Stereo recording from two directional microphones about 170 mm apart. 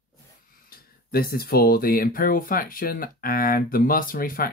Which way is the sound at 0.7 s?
65° left (ahead or behind).